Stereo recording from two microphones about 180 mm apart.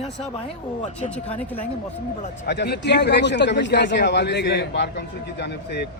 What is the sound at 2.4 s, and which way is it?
A man's voice, 70° left (ahead or behind).